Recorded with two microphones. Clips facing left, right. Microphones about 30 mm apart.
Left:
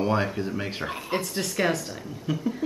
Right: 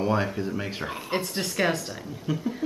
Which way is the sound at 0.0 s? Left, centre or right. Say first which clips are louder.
Even; centre.